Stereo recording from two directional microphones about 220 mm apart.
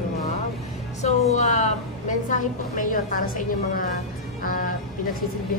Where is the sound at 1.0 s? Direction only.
30° left (ahead or behind).